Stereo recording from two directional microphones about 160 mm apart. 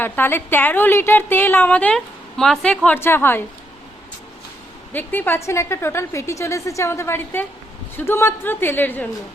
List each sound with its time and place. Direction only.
0.0 s a woman's voice: 15° left (ahead or behind)
4.9 s a woman's voice: 10° left (ahead or behind)